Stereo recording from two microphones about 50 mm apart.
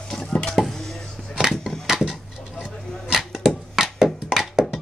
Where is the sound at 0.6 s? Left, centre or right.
Centre.